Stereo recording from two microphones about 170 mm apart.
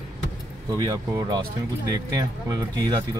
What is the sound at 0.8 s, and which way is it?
Speech, 25° right (ahead or behind).